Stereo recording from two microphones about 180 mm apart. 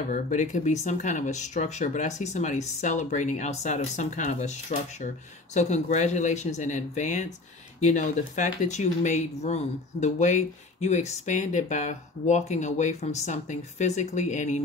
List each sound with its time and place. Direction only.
0.1 s speech: 45° left (ahead or behind)